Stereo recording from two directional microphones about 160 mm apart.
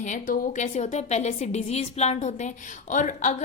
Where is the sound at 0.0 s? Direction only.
50° left (ahead or behind).